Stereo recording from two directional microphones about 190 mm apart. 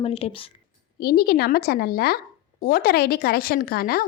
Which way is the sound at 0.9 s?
55° left (ahead or behind).